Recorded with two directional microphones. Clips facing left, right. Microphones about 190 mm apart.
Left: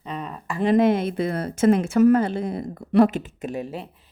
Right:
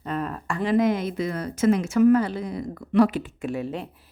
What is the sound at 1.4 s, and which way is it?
Speech, 30° left (ahead or behind).